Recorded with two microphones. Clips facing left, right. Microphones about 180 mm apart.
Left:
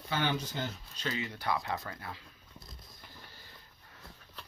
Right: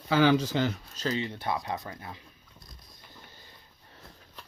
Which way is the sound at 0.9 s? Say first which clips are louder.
Right 3 dB; 35° right (ahead or behind).